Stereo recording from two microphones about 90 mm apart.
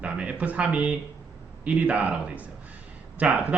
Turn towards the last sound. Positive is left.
turn(degrees=-15)  # may be behind; listen again after turning